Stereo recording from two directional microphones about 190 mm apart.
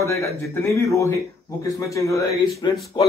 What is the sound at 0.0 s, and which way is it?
A man's voice, 15° left (ahead or behind).